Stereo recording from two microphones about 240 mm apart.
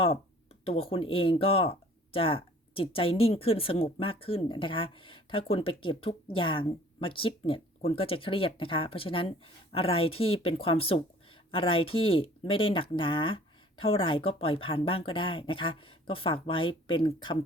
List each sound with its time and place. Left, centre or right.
0.6 s speech: left